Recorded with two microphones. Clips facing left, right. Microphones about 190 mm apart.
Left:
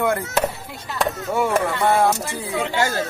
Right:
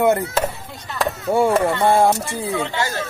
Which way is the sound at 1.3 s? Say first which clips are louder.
Right 6 dB; 30° right (ahead or behind).